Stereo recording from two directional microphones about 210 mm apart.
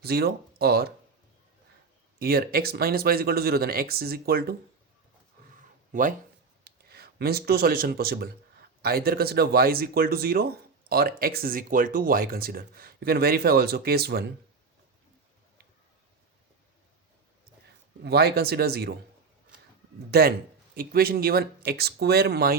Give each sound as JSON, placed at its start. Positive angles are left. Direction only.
{"t": 0.0, "sound": "speech", "side_deg": -50}
{"t": 2.1, "sound": "speech", "side_deg": -45}
{"t": 5.9, "sound": "speech", "side_deg": -40}
{"t": 6.7, "sound": "speech", "side_deg": -50}
{"t": 18.0, "sound": "speech", "side_deg": -50}
{"t": 20.1, "sound": "speech", "side_deg": -50}